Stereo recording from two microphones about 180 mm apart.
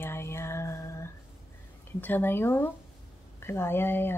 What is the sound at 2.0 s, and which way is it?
Speech, 10° left (ahead or behind).